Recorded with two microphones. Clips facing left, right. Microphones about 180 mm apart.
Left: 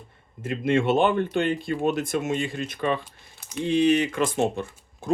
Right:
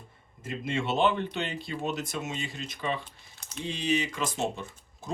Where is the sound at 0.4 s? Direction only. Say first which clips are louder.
Left 9 dB; 55° left (ahead or behind).